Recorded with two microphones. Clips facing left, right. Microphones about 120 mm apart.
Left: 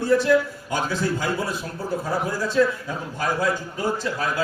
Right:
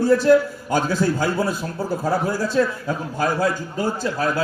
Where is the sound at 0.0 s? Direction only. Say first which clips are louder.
Right 4 dB; 35° right (ahead or behind).